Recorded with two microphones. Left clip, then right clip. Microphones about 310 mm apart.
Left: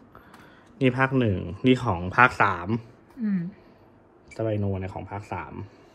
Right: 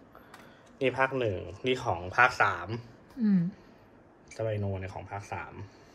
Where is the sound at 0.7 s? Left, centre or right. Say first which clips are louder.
Left 4 dB; left.